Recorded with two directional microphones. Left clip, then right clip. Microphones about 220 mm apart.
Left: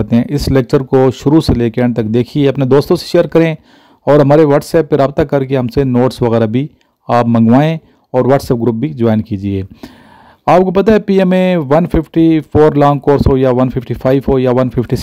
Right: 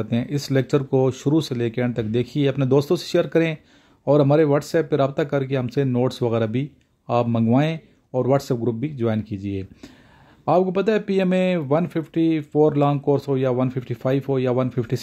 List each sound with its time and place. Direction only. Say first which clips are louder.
0.0 s speech: left 11 dB; 35° left (ahead or behind)